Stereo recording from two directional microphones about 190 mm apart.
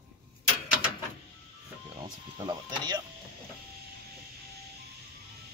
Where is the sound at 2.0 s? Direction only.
20° right (ahead or behind).